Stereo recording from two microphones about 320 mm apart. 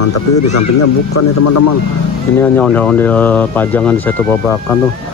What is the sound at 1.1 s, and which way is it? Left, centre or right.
Speech, left.